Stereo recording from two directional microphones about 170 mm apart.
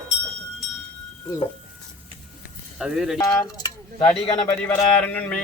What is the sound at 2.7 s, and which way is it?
Speech, 5° right (ahead or behind).